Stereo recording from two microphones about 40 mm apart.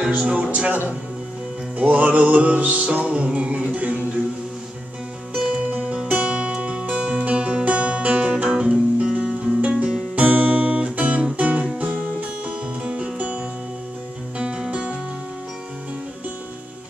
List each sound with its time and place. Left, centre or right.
0.3 s music: right
1.8 s music: right
5.7 s music: right
10.1 s music: right
14.4 s music: right